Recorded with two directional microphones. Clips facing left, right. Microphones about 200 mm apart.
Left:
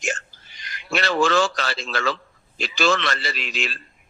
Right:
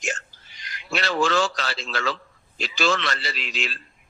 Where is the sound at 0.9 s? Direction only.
50° left (ahead or behind).